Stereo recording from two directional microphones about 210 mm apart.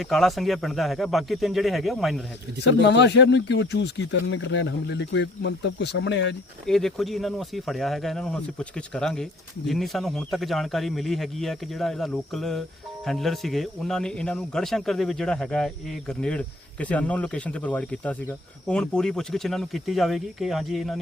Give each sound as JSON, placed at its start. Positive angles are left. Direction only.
{"t": 0.0, "sound": "speech", "side_deg": 0}
{"t": 2.8, "sound": "speech", "side_deg": 55}
{"t": 6.7, "sound": "speech", "side_deg": 0}